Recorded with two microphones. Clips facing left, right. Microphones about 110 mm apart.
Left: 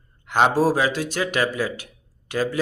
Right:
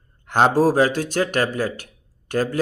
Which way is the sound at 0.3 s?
40° right (ahead or behind).